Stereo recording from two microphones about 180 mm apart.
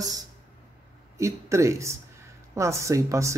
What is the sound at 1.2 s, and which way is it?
Speech, 15° right (ahead or behind).